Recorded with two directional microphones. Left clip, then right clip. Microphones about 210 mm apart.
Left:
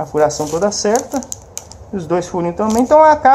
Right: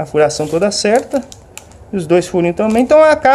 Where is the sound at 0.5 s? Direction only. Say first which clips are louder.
Right 3 dB; 65° right (ahead or behind).